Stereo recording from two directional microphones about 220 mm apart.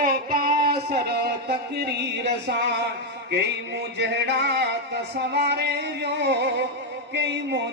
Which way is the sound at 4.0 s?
50° right (ahead or behind).